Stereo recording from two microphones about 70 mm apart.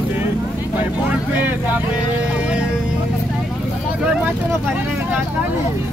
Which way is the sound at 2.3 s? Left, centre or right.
Centre.